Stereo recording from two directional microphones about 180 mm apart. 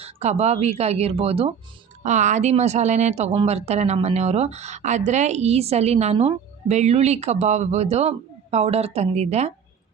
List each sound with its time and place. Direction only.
0.0 s a woman's voice: 35° right (ahead or behind)